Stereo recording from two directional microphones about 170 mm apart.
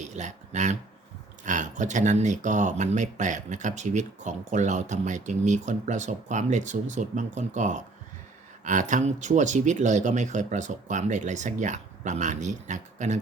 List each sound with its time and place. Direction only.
0.0 s speech: 45° right (ahead or behind)